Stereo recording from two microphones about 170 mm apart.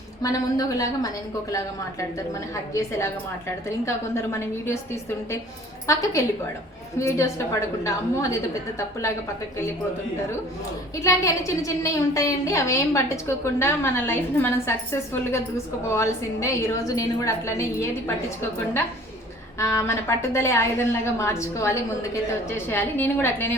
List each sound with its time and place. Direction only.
0.2 s a woman's voice: 20° left (ahead or behind)
3.8 s a woman's voice: 15° left (ahead or behind)
5.9 s a woman's voice: 15° left (ahead or behind)
11.0 s a woman's voice: 20° left (ahead or behind)
19.5 s a woman's voice: 15° left (ahead or behind)